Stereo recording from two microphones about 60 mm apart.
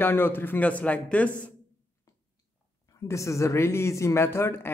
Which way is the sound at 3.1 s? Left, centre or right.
Left.